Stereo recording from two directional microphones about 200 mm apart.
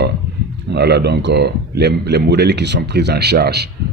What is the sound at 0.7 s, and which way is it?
Speech, 55° right (ahead or behind).